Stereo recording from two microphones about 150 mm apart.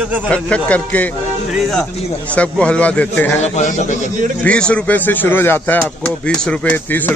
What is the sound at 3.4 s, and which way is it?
Speech, 50° left (ahead or behind).